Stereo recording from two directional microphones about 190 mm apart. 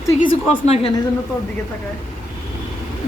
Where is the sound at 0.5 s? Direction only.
35° left (ahead or behind).